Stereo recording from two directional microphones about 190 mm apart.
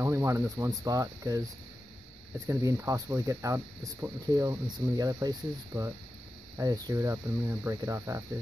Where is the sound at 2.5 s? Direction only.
15° right (ahead or behind).